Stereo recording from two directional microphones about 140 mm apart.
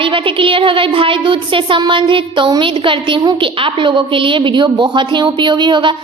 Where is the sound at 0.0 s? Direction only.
40° right (ahead or behind).